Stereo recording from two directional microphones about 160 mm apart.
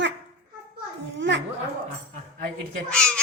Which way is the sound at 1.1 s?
90° right.